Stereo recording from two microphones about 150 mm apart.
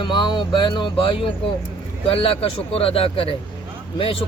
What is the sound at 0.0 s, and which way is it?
Speech, 30° left (ahead or behind).